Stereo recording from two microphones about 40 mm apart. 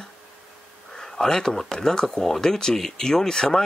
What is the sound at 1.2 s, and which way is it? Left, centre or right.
Speech, centre.